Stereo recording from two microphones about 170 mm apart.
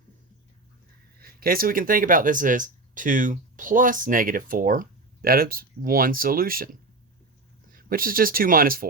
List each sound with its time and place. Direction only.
1.2 s speech: 60° right (ahead or behind)
7.7 s speech: 55° right (ahead or behind)